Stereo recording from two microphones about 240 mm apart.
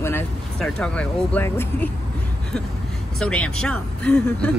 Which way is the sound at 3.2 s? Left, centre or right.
Centre.